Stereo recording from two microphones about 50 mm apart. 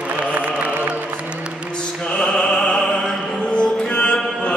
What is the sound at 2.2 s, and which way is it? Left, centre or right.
Music, centre.